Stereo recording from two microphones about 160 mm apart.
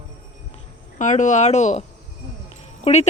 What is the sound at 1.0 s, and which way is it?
Speech, 50° left (ahead or behind).